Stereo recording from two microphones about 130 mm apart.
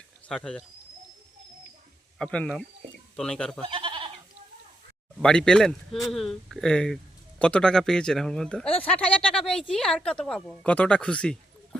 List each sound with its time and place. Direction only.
0.3 s speech: 5° left (ahead or behind)
2.1 s speech: 5° left (ahead or behind)
3.7 s goat: 40° right (ahead or behind)
5.2 s speech: 5° left (ahead or behind)